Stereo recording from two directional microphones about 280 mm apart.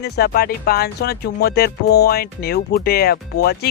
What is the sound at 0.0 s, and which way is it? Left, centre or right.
Speech, left.